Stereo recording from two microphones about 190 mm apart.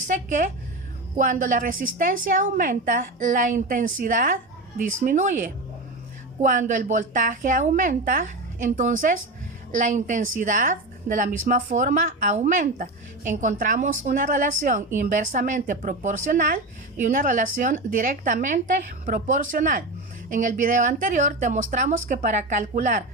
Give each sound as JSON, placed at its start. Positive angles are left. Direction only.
{"t": 0.1, "sound": "a woman's voice", "side_deg": -40}